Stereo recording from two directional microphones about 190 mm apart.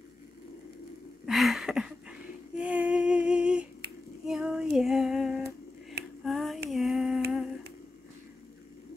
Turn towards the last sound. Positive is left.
turn(degrees=0)  # may be behind; listen again after turning